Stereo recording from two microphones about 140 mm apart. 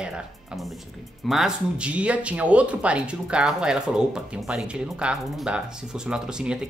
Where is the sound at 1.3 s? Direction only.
5° right (ahead or behind).